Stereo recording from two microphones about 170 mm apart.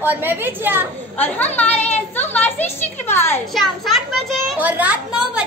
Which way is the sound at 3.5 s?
Centre (ahead or behind).